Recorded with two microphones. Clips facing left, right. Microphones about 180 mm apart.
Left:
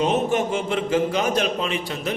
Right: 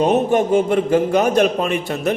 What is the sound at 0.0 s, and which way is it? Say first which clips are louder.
A man's voice: right 5 dB; 55° right (ahead or behind).